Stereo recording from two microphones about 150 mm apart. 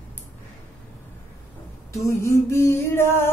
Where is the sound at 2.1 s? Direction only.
20° left (ahead or behind).